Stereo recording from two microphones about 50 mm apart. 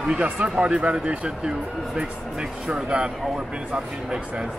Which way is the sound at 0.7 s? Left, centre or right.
Centre.